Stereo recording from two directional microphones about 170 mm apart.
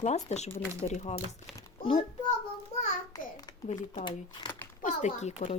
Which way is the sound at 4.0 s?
30° left (ahead or behind).